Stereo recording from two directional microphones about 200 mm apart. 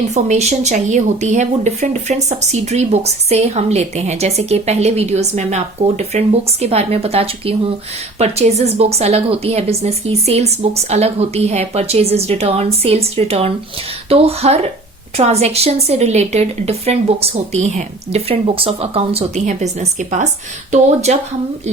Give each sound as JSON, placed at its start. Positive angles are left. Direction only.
{"t": 0.1, "sound": "a woman's voice", "side_deg": -35}